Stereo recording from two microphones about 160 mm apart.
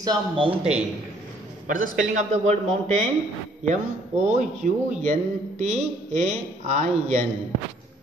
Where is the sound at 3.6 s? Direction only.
45° right (ahead or behind).